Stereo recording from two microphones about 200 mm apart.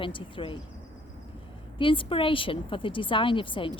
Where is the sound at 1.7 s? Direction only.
25° left (ahead or behind).